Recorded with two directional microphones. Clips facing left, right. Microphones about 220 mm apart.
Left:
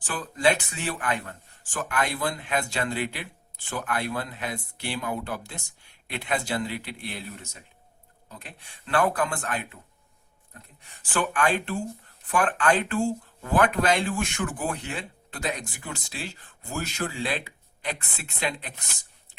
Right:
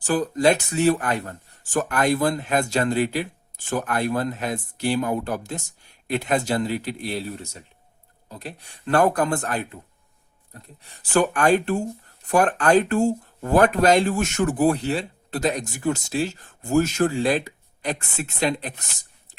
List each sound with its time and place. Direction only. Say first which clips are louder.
0.0 s speech: right 6 dB; 40° right (ahead or behind)